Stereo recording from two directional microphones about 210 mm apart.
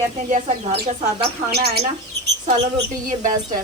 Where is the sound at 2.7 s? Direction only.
35° right (ahead or behind).